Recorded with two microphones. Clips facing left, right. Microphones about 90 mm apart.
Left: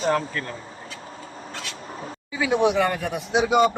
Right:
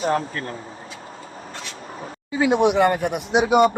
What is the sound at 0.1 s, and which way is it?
Speech, 30° right (ahead or behind).